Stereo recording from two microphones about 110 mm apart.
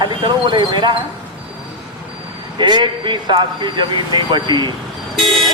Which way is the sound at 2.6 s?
45° right (ahead or behind).